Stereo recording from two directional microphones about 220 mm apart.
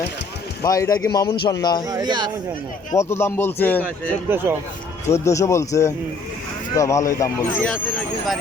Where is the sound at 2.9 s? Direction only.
10° left (ahead or behind).